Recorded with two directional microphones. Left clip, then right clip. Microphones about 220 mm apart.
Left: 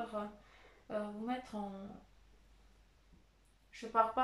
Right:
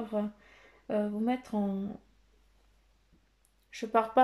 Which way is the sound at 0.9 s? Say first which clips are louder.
Right 9 dB; 40° right (ahead or behind).